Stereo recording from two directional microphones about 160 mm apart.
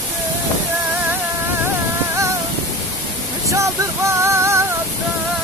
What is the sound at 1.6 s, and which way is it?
Music, 20° right (ahead or behind).